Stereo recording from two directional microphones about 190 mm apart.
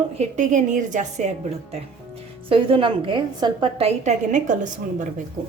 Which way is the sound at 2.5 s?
30° right (ahead or behind).